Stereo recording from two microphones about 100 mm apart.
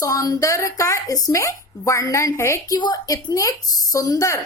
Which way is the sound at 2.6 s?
40° left (ahead or behind).